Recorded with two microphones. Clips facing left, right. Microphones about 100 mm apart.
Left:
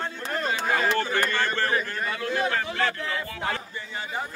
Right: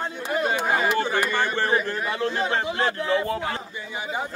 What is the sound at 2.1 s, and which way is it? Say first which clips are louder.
A man's voice: right 1 dB; 25° right (ahead or behind).